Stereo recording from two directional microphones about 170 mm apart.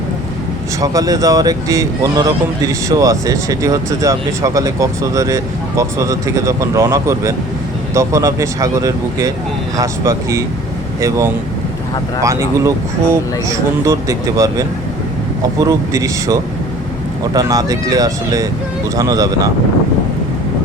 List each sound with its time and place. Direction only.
0.8 s speech: 20° right (ahead or behind)
12.2 s speech: 20° right (ahead or behind)